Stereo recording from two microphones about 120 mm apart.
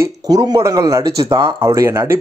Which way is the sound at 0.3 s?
35° right (ahead or behind).